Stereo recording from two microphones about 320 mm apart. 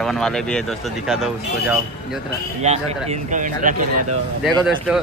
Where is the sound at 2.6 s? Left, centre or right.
Right.